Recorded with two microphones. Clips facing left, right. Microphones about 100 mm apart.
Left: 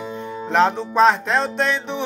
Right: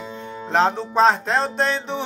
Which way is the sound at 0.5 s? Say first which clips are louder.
Left 2 dB; 35° right (ahead or behind).